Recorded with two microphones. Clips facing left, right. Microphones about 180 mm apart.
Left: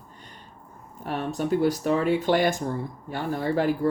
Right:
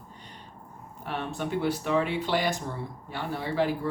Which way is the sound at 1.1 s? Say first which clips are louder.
Left 6 dB; 40° left (ahead or behind).